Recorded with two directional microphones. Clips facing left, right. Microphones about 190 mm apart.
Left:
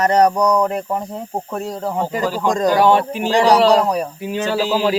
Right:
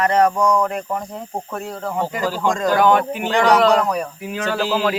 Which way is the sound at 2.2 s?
15° left (ahead or behind).